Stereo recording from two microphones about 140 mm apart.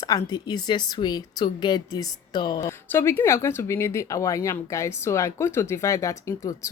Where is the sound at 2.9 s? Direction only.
15° left (ahead or behind).